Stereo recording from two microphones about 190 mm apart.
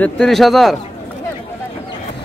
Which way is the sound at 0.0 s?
Centre (ahead or behind).